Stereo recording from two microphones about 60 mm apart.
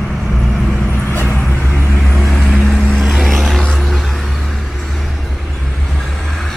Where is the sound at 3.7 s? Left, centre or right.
Centre.